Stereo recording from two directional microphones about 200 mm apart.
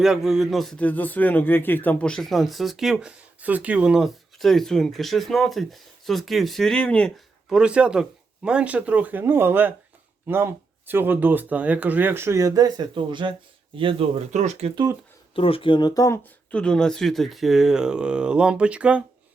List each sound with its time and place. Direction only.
0.0 s a man's voice: centre (ahead or behind); by 14.7 s 35° right (ahead or behind)
15.4 s a man's voice: 25° left (ahead or behind); by 19.0 s 5° right (ahead or behind)